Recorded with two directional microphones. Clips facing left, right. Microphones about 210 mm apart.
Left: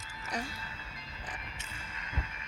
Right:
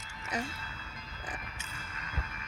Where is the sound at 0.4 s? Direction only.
30° left (ahead or behind).